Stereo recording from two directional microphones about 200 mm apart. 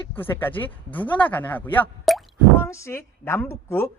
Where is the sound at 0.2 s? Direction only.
10° left (ahead or behind).